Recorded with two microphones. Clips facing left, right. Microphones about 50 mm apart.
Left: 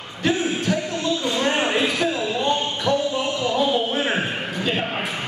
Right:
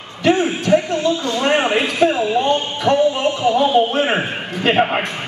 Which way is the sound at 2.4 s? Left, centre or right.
Right.